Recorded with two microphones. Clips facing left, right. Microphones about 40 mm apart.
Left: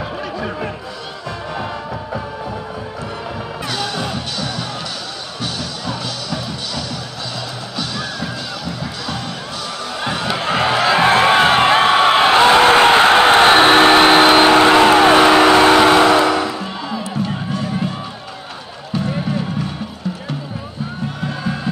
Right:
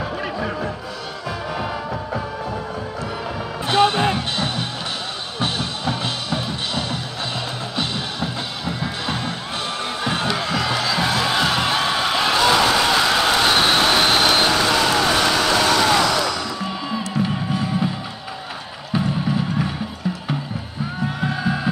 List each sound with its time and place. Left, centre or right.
3.6 s music: right
10.2 s music: left
17.2 s music: centre
21.2 s a sound: centre